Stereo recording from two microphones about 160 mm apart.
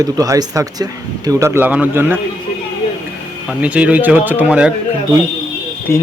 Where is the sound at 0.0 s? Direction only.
20° right (ahead or behind).